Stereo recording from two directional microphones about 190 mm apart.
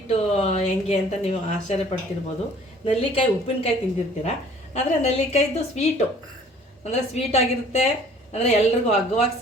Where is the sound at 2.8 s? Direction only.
35° left (ahead or behind).